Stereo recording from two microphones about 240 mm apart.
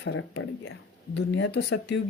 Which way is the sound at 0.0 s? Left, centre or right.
Left.